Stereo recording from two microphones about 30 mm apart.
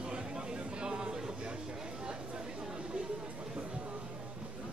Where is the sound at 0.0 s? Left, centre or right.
Right.